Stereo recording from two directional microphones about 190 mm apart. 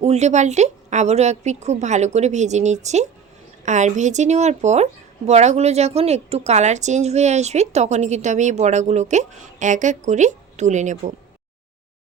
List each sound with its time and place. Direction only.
0.0 s speech: 35° right (ahead or behind)